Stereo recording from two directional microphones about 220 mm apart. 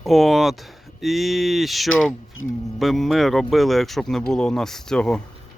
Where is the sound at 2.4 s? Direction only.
65° left (ahead or behind).